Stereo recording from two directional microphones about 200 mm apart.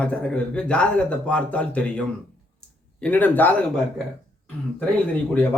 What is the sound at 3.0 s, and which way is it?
Speech, 10° left (ahead or behind).